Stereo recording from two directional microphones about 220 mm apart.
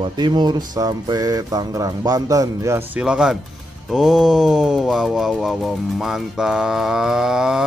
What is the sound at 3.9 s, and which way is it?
Speech, centre (ahead or behind).